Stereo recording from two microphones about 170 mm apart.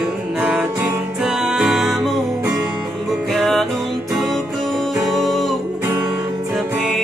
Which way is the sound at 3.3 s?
Centre (ahead or behind).